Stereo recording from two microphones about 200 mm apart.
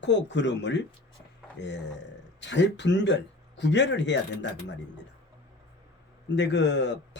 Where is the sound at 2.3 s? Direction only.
60° left (ahead or behind).